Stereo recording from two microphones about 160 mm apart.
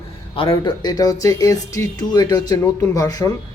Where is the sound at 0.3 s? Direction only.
30° left (ahead or behind).